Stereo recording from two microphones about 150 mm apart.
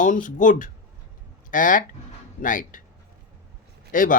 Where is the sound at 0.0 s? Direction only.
60° left (ahead or behind).